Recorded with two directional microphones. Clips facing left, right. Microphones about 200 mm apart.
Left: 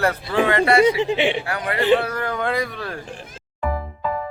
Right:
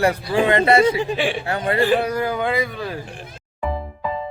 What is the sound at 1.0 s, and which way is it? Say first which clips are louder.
Speech: left 2 dB; 20° left (ahead or behind).